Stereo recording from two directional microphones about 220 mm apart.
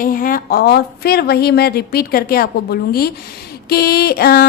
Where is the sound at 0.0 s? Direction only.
40° left (ahead or behind).